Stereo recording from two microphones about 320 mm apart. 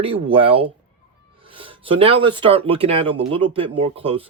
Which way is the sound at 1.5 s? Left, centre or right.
Centre.